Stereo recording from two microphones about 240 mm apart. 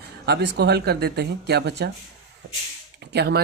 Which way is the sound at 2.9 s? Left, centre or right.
Right.